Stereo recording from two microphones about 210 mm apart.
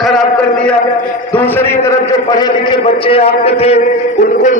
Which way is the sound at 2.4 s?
25° left (ahead or behind).